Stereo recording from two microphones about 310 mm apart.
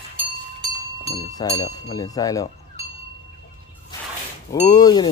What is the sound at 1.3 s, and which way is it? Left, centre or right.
Speech, centre.